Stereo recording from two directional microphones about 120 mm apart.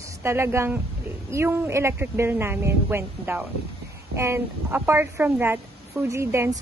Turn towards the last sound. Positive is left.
turn(degrees=-20)  # may be behind; listen again after turning